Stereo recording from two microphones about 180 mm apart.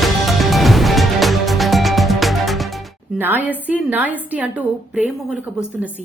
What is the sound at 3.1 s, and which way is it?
A woman's voice, 10° right (ahead or behind).